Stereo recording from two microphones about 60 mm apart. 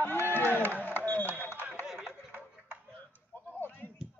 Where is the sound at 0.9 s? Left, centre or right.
Left.